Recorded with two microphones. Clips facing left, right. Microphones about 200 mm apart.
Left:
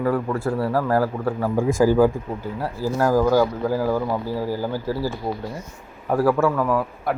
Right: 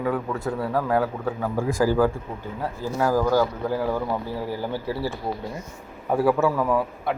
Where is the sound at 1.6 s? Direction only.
20° left (ahead or behind); by 6.8 s 5° right (ahead or behind).